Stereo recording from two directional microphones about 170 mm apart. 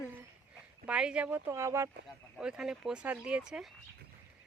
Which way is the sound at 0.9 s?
5° right (ahead or behind).